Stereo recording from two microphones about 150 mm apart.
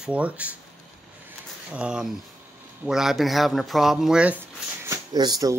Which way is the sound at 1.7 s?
5° right (ahead or behind).